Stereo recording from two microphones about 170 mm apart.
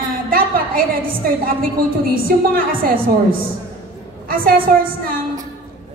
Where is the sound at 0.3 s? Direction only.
55° right (ahead or behind).